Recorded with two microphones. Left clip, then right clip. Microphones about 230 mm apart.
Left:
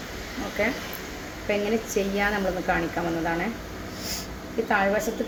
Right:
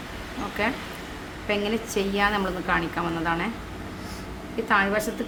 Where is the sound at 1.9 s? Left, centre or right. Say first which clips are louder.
Right 4 dB; centre.